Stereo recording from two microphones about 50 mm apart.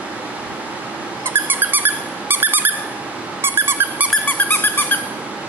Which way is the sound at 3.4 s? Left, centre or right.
Right.